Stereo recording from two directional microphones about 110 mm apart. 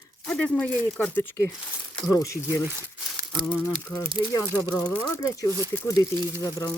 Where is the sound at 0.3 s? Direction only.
10° left (ahead or behind).